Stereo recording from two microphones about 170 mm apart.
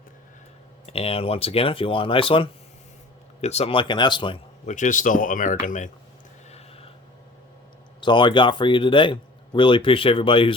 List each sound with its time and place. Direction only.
0.9 s speech: 35° left (ahead or behind)
4.6 s speech: 50° left (ahead or behind)
6.5 s a sound: 35° left (ahead or behind)
8.0 s speech: 30° left (ahead or behind)